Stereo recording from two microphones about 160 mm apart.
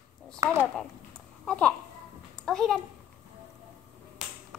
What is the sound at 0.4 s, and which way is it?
Speech, 15° right (ahead or behind).